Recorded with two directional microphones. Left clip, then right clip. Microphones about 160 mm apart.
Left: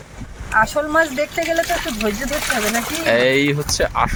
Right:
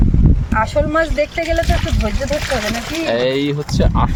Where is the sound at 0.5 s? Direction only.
50° right (ahead or behind).